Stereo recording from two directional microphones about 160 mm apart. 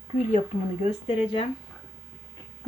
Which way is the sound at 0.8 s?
40° left (ahead or behind).